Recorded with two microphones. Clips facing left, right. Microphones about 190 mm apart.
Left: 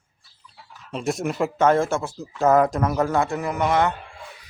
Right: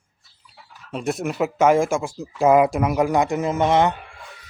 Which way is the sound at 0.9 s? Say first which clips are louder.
Even; centre (ahead or behind).